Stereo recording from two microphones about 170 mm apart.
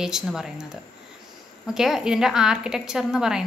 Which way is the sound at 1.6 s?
5° right (ahead or behind).